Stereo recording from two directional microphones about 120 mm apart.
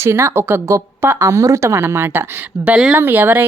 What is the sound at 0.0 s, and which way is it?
A woman's voice, 20° right (ahead or behind).